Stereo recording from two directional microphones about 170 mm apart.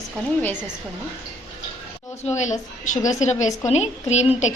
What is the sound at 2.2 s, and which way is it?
A woman's voice, 45° left (ahead or behind).